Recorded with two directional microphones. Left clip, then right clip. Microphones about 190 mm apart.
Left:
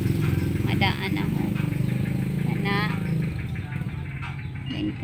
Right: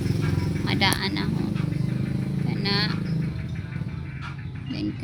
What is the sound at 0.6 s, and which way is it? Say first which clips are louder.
Vehicle: right 3 dB; 5° right (ahead or behind).